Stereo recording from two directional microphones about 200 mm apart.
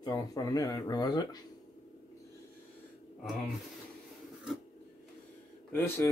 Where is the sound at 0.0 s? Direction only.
20° left (ahead or behind).